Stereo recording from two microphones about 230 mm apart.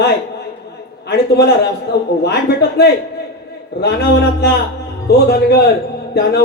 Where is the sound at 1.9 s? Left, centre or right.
Left.